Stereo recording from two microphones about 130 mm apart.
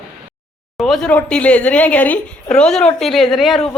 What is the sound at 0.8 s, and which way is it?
A woman's voice, 5° left (ahead or behind).